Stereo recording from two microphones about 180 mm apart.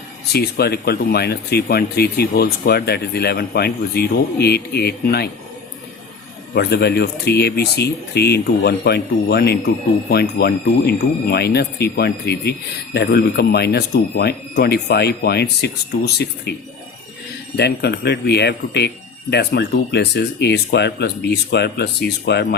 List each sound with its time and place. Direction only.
0.3 s speech: 60° left (ahead or behind)
6.5 s speech: 65° left (ahead or behind)